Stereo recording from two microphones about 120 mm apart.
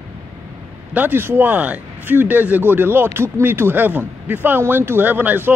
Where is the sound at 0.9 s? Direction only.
15° right (ahead or behind).